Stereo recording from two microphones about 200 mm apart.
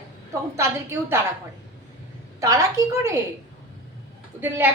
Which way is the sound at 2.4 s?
15° right (ahead or behind).